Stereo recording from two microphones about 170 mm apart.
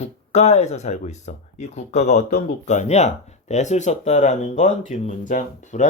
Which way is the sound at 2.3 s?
65° left (ahead or behind).